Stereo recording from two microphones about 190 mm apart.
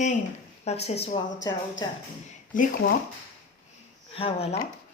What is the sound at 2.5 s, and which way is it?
Speech, 45° left (ahead or behind).